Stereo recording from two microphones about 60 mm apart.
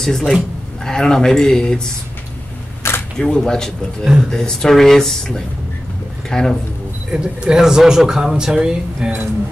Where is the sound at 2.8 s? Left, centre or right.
Left.